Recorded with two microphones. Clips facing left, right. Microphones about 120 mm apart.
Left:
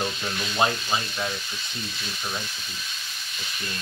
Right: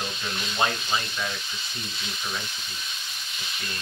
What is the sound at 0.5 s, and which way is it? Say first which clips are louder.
Sizzle: left 2 dB; 20° left (ahead or behind).